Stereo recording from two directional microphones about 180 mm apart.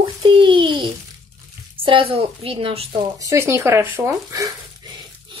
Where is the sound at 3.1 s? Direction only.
15° right (ahead or behind).